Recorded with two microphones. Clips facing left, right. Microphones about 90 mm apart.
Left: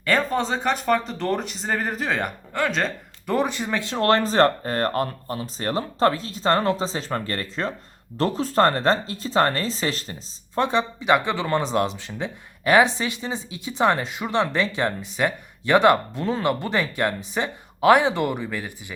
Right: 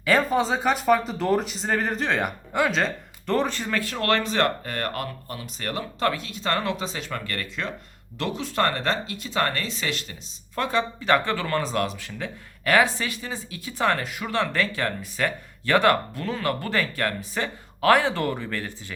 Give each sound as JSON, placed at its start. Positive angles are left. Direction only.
{"t": 0.0, "sound": "speech", "side_deg": -5}
{"t": 3.3, "sound": "speech", "side_deg": 15}